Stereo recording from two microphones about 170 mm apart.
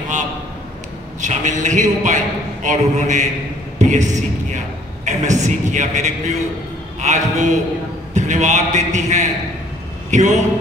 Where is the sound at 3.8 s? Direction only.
45° right (ahead or behind).